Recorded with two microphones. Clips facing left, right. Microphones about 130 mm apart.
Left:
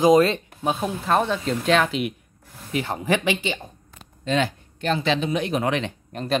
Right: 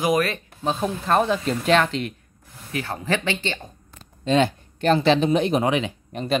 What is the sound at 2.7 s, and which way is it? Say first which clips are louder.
Speech: left 2 dB; 20° left (ahead or behind).